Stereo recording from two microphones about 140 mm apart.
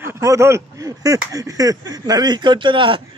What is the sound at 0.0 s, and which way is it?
Speech, 20° right (ahead or behind).